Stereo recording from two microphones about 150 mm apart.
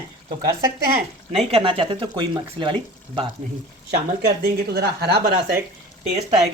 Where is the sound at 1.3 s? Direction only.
40° right (ahead or behind).